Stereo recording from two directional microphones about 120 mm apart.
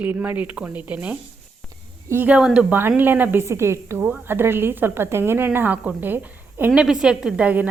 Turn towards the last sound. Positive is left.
turn(degrees=-10)  # may be behind; listen again after turning